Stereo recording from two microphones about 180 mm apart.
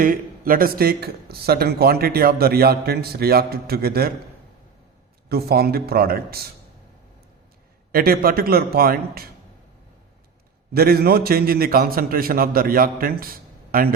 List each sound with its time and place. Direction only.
0.0 s speech: 50° right (ahead or behind)
5.3 s speech: 60° right (ahead or behind)
7.9 s speech: 55° right (ahead or behind)
10.8 s speech: 60° right (ahead or behind)